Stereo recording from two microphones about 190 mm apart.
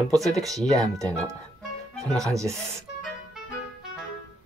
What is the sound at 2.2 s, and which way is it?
Speech, 15° right (ahead or behind).